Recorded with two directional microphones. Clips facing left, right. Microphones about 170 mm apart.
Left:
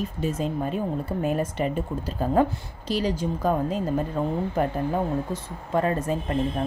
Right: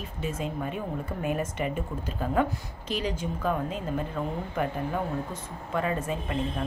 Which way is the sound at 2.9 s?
35° left (ahead or behind).